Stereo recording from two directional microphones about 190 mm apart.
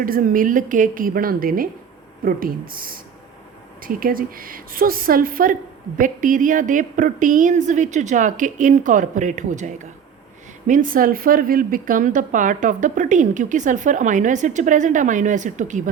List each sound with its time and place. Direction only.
0.0 s a woman's voice: 45° right (ahead or behind)